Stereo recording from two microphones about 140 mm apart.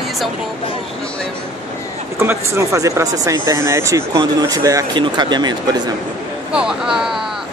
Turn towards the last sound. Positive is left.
turn(degrees=-5)  # may be behind; listen again after turning